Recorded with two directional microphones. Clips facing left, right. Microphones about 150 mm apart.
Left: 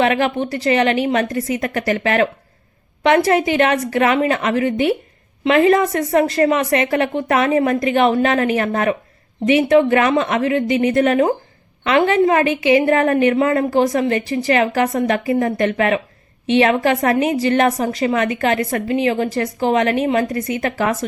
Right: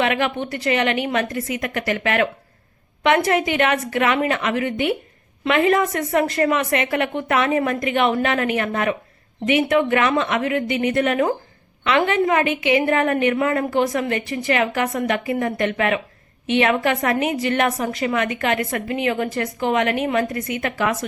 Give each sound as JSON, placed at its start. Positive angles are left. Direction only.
{"t": 0.0, "sound": "a woman's voice", "side_deg": 35}